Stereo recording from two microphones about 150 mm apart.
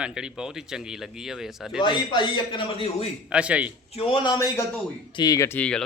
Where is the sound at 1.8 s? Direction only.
30° left (ahead or behind).